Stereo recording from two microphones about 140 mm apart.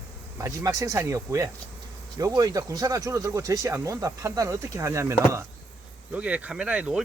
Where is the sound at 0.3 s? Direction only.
25° right (ahead or behind).